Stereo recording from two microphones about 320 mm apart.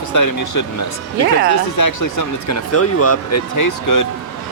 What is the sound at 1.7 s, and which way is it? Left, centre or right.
Speech, left.